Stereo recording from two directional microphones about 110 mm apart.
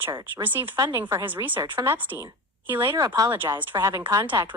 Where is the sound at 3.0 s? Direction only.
35° right (ahead or behind).